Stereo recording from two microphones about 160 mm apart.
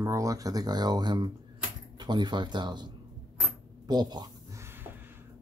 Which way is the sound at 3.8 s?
25° right (ahead or behind).